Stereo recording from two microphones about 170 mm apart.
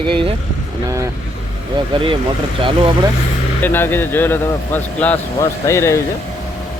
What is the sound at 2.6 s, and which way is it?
Speech, 30° right (ahead or behind).